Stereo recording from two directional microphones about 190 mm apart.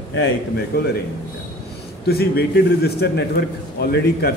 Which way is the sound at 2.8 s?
60° left (ahead or behind).